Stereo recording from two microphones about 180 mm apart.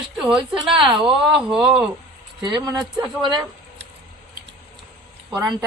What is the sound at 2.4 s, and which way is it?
Speech, 20° right (ahead or behind).